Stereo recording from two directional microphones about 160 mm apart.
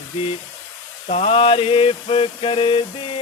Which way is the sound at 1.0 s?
40° left (ahead or behind).